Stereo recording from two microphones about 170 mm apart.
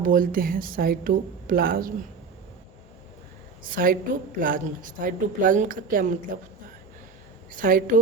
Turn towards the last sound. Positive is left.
turn(degrees=-55)  # may be behind; listen again after turning